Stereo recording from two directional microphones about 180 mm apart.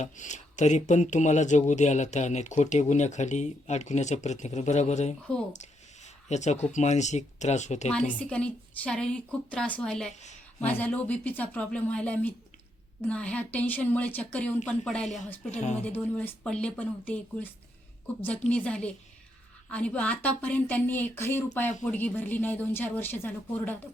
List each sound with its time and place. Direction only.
0.0 s speech: 40° left (ahead or behind)
6.2 s speech: 40° left (ahead or behind)
7.9 s a woman's voice: 5° left (ahead or behind)
10.1 s a woman's voice: 40° left (ahead or behind)
10.7 s speech: 10° left (ahead or behind)
18.5 s speech: 5° left (ahead or behind)